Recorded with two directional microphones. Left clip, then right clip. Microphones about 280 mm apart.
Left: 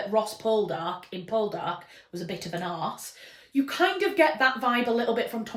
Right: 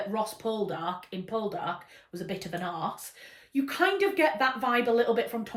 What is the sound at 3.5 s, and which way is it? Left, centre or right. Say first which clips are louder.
Speech: left 2 dB; centre.